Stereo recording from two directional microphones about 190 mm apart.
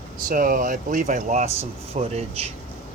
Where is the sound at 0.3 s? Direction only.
45° right (ahead or behind).